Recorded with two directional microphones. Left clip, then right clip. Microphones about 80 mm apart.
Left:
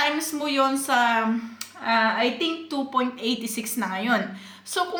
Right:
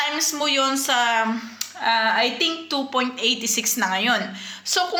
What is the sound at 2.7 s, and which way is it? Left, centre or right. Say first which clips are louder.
A woman's voice: right 2 dB; left.